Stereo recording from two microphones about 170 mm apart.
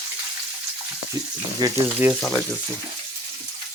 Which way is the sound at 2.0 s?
15° right (ahead or behind).